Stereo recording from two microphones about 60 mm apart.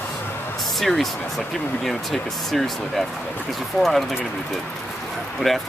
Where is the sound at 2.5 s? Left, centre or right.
Centre.